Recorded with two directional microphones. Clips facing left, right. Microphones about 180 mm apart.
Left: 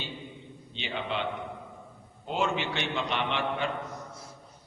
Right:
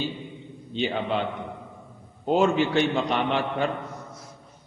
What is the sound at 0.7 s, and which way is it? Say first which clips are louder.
Speech: right 8 dB; 40° right (ahead or behind).